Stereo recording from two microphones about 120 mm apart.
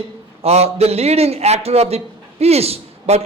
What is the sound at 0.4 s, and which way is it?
Speech, 60° right (ahead or behind).